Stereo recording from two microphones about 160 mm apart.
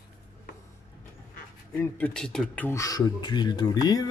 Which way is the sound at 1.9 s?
10° left (ahead or behind).